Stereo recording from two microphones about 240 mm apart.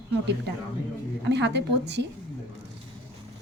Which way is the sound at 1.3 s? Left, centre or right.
Right.